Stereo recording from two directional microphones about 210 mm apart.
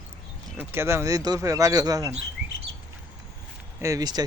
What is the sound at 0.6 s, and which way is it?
Speech, 10° right (ahead or behind).